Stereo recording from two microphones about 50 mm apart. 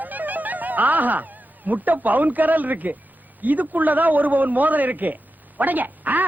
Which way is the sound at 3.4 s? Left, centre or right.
Right.